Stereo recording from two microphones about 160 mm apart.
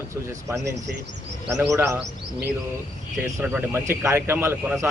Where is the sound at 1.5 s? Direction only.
20° right (ahead or behind).